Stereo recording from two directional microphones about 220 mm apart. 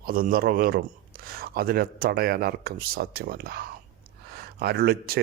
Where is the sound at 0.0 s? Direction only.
40° right (ahead or behind).